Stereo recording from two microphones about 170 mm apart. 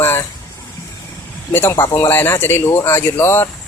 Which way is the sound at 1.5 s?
15° left (ahead or behind).